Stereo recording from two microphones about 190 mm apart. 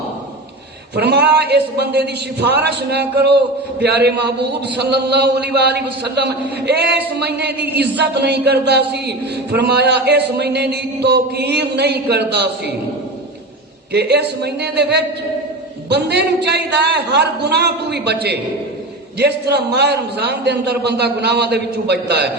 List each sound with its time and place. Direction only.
0.9 s a man's voice: 60° right (ahead or behind)
13.9 s a man's voice: 60° right (ahead or behind)